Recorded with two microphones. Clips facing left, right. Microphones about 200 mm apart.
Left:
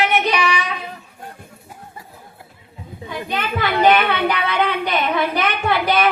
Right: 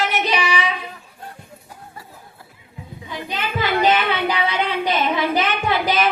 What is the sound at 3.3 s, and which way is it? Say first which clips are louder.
Child singing: even; 60° left (ahead or behind).